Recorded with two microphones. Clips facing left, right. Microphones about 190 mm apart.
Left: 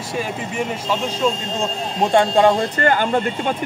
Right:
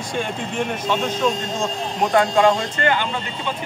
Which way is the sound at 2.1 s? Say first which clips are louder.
Left 2 dB; 30° left (ahead or behind).